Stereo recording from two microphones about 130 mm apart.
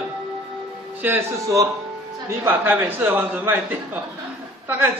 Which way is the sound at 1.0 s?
20° right (ahead or behind).